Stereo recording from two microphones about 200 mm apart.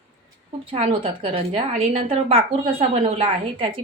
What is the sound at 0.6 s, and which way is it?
A woman's voice, 30° right (ahead or behind).